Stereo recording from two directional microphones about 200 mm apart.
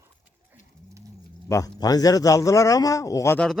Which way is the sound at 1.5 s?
20° left (ahead or behind).